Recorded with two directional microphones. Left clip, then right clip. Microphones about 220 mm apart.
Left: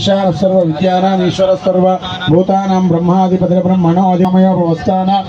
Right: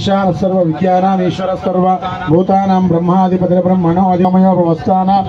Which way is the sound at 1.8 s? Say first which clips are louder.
Left 1 dB; 40° left (ahead or behind).